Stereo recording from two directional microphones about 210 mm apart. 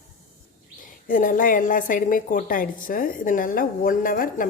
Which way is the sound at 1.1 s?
40° left (ahead or behind).